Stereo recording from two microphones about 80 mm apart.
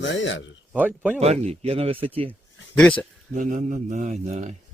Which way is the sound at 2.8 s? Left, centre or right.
Centre.